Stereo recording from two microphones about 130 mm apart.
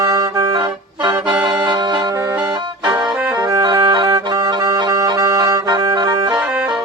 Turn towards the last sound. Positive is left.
turn(degrees=-35)  # may be behind; listen again after turning